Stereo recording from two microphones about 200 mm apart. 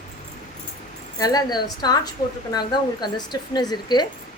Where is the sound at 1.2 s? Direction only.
20° left (ahead or behind).